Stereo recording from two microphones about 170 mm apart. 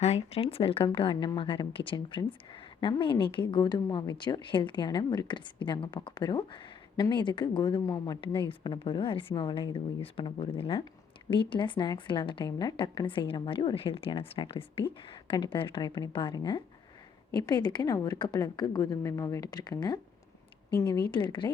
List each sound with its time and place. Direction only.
0.0 s a woman's voice: 40° left (ahead or behind); by 21.0 s 15° left (ahead or behind)
21.1 s a woman's voice: 30° left (ahead or behind)